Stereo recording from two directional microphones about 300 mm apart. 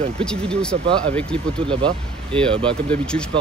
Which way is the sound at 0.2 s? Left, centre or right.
Centre.